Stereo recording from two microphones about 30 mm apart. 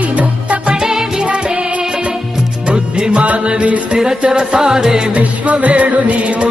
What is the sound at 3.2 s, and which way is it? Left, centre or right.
Music, right.